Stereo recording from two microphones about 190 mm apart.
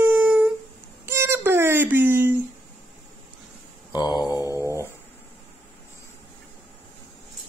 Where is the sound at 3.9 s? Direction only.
20° left (ahead or behind).